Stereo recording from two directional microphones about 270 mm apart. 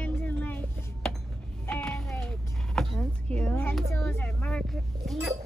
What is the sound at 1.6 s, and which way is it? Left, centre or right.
Speech, centre.